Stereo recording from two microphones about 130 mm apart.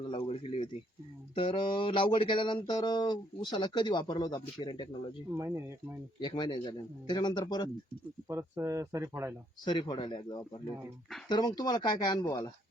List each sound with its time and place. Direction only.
0.0 s speech: 45° left (ahead or behind)
5.3 s speech: 20° right (ahead or behind)
6.2 s speech: 35° left (ahead or behind)
8.3 s speech: 25° right (ahead or behind)
9.6 s speech: 35° left (ahead or behind)